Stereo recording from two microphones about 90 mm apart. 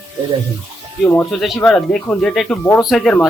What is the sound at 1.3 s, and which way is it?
Speech, centre (ahead or behind).